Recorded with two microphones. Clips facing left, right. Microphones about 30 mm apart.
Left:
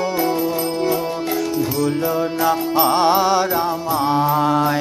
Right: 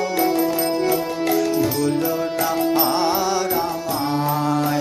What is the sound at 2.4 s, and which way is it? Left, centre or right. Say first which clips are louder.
Music: left 3 dB; left.